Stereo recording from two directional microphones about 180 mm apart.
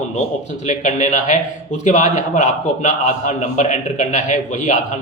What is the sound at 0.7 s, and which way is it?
A man's voice, 45° left (ahead or behind).